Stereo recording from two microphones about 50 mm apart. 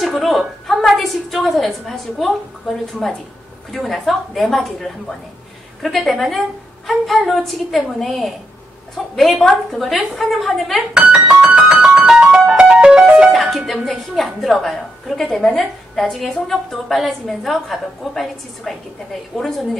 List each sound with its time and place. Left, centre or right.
0.0 s a woman's voice: centre
11.5 s music: centre
13.3 s a woman's voice: centre